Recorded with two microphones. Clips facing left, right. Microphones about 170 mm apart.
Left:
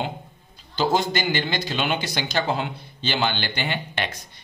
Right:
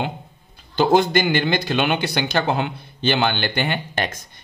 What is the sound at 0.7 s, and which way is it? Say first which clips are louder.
Speech: right 6 dB; 55° right (ahead or behind).